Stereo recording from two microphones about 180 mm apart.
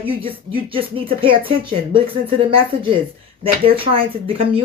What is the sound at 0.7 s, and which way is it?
Speech, 30° right (ahead or behind).